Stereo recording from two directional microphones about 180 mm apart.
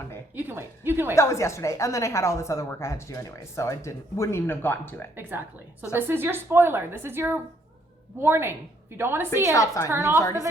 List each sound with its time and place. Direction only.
0.3 s a woman's voice: 10° right (ahead or behind)
1.1 s a woman's voice: 15° left (ahead or behind)
5.9 s a woman's voice: 10° right (ahead or behind)
9.5 s a woman's voice: 15° left (ahead or behind)
9.9 s a woman's voice: 15° right (ahead or behind)
10.2 s a woman's voice: 15° left (ahead or behind)